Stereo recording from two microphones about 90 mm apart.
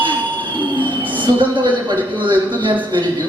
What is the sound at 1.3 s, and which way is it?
Speech, 50° right (ahead or behind).